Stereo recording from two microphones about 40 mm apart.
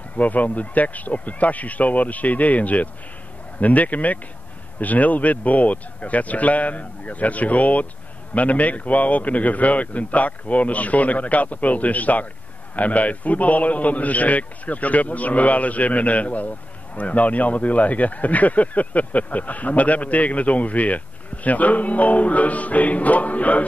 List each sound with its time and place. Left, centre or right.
0.1 s a man's voice: left